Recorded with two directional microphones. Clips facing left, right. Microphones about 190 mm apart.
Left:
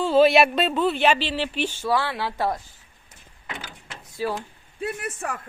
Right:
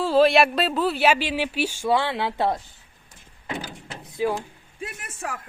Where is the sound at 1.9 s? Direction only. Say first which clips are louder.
Right 3 dB; 20° right (ahead or behind).